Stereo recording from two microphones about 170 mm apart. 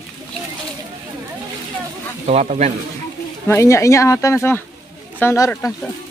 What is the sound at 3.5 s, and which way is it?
Speech, 15° left (ahead or behind).